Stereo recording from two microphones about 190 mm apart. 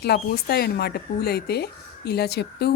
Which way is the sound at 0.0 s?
55° left (ahead or behind).